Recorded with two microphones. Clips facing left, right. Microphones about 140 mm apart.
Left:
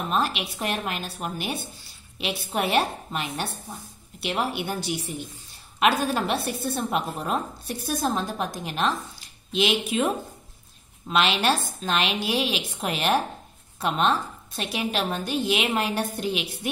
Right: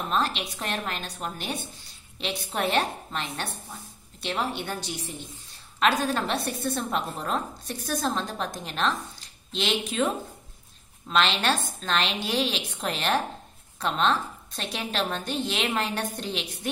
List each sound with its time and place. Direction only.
0.1 s a woman's voice: 10° left (ahead or behind)
11.1 s a woman's voice: 10° left (ahead or behind)